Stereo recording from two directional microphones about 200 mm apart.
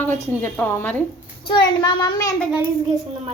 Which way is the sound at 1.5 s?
20° left (ahead or behind).